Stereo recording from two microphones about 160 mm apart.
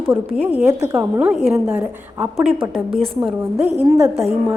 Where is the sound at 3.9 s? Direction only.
20° right (ahead or behind).